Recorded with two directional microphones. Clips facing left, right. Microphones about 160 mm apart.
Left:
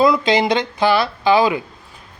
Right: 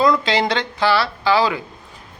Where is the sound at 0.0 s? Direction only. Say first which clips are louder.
Left 2 dB; 15° left (ahead or behind).